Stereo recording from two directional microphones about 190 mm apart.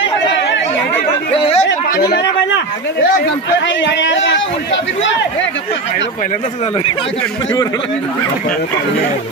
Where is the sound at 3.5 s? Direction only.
70° left (ahead or behind).